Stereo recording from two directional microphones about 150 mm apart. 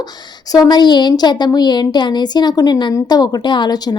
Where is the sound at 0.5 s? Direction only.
25° left (ahead or behind).